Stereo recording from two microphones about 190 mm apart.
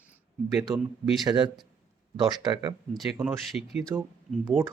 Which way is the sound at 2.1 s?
20° right (ahead or behind).